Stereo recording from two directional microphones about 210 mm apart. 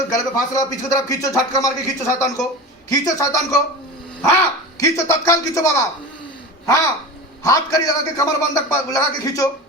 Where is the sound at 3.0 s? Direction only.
15° left (ahead or behind).